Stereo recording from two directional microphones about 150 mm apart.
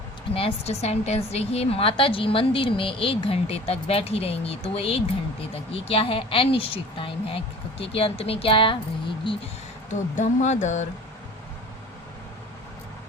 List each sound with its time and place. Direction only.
0.3 s a woman's voice: 40° left (ahead or behind)
9.9 s speech: 55° left (ahead or behind)